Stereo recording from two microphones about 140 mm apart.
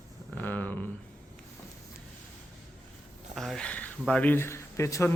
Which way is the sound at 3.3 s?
Centre (ahead or behind).